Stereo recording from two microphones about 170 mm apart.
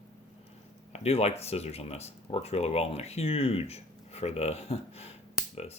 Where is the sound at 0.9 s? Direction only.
35° left (ahead or behind).